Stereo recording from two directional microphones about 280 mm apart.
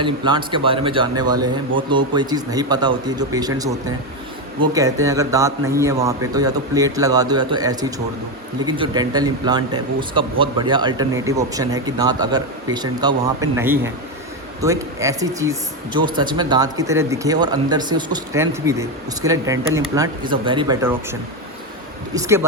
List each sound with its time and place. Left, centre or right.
0.0 s speech: centre
5.0 s speech: centre